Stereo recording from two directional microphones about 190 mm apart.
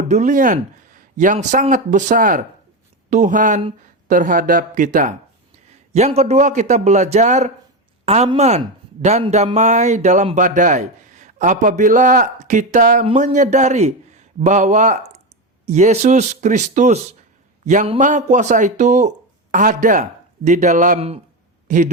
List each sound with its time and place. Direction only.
0.1 s speech: 40° right (ahead or behind)